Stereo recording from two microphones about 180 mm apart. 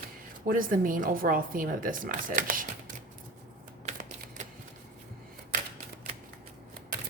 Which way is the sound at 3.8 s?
45° right (ahead or behind).